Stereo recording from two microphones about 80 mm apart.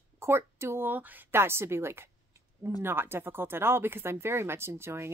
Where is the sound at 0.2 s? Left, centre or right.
Right.